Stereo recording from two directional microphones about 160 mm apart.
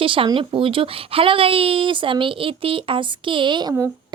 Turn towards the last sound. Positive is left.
turn(degrees=-25)  # may be behind; listen again after turning